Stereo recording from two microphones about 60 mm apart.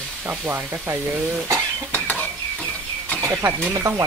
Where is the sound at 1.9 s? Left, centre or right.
Left.